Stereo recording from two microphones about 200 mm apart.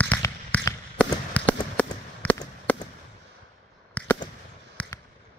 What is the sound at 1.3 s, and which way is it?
Fireworks, 10° left (ahead or behind).